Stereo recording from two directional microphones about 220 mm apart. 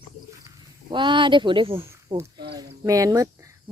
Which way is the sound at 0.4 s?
20° right (ahead or behind).